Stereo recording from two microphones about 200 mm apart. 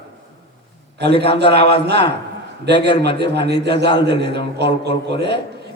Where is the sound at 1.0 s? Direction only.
55° right (ahead or behind).